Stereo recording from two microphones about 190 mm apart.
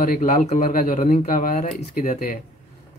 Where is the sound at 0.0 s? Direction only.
45° left (ahead or behind).